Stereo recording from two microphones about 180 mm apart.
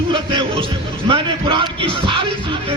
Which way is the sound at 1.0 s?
30° right (ahead or behind).